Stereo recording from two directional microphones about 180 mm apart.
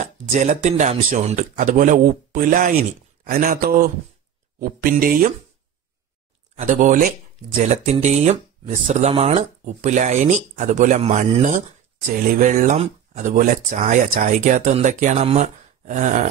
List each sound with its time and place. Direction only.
0.0 s speech: 40° right (ahead or behind)
6.5 s speech: 45° right (ahead or behind)